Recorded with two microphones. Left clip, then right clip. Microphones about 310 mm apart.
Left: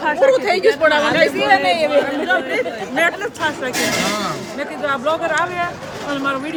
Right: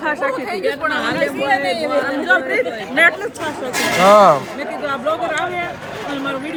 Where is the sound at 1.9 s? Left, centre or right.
Centre.